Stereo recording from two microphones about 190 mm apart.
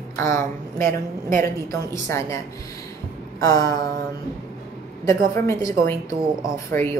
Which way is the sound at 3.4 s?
20° left (ahead or behind).